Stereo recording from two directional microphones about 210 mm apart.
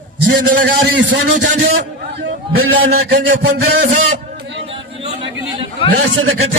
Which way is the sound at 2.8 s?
45° right (ahead or behind).